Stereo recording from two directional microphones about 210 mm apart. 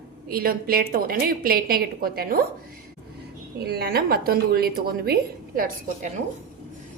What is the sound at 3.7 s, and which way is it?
Speech, 45° right (ahead or behind).